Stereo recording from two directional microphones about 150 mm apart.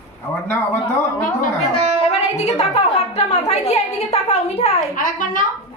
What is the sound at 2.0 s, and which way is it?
A woman's voice, 45° left (ahead or behind).